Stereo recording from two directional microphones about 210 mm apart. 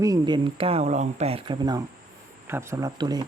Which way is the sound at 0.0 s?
20° right (ahead or behind).